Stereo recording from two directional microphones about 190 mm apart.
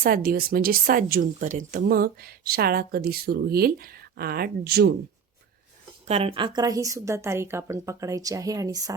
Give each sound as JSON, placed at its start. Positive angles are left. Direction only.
{"t": 0.0, "sound": "a woman's voice", "side_deg": -50}
{"t": 6.1, "sound": "a woman's voice", "side_deg": -30}